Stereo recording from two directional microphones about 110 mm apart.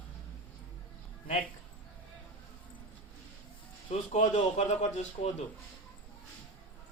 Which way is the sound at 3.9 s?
90° left.